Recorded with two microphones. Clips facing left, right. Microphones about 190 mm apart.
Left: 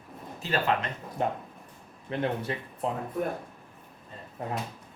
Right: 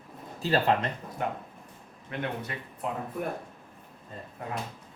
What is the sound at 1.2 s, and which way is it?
Speech, 30° left (ahead or behind).